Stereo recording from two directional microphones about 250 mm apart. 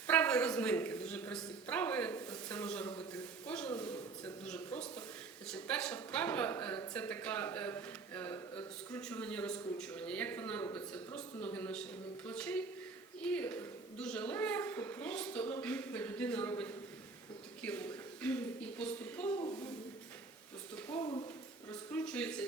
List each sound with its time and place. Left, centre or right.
0.1 s speech: centre
3.4 s a sound: centre
4.4 s a woman's voice: centre
21.0 s speech: centre
21.7 s speech: centre